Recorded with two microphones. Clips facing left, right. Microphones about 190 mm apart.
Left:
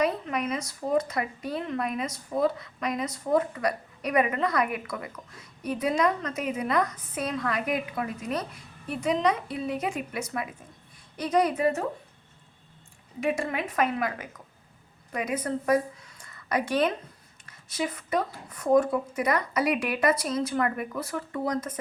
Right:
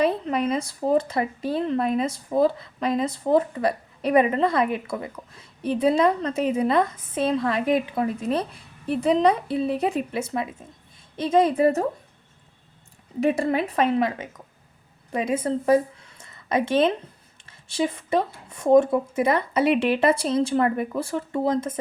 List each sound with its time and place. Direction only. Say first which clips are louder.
0.0 s speech: right 5 dB; 30° right (ahead or behind)
13.1 s a woman's voice: right 6 dB; 35° right (ahead or behind)